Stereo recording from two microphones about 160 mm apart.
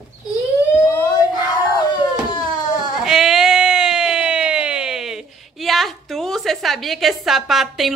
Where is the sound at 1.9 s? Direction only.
25° left (ahead or behind).